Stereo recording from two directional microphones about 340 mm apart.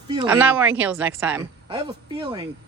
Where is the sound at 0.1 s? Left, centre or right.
Centre.